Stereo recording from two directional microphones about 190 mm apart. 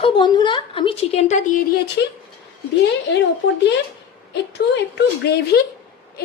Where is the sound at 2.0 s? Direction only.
60° left (ahead or behind).